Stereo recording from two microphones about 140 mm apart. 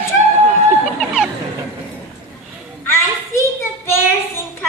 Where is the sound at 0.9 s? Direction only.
5° right (ahead or behind).